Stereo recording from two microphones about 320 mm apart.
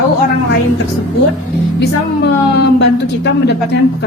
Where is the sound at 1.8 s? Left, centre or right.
Left.